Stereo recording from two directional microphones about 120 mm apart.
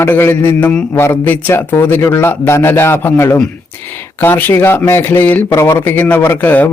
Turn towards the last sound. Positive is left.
turn(degrees=15)  # may be behind; listen again after turning